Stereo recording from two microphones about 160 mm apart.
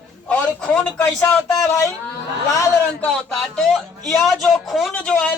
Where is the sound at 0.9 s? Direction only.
15° left (ahead or behind).